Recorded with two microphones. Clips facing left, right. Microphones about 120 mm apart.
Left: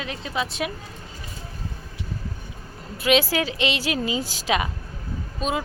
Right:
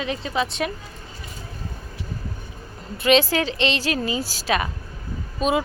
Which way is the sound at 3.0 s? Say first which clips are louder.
Right 2 dB; 5° left (ahead or behind).